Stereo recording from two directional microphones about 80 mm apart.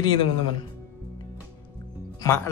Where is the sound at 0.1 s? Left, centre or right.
Left.